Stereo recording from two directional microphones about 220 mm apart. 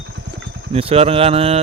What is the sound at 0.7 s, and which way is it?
Speech, 25° right (ahead or behind).